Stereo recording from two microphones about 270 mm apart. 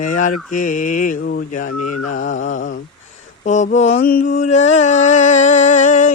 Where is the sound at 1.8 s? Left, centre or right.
Left.